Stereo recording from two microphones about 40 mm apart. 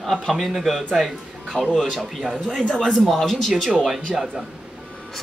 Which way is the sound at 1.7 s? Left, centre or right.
Centre.